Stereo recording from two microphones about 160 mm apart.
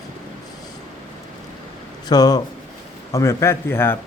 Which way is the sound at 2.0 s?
25° left (ahead or behind).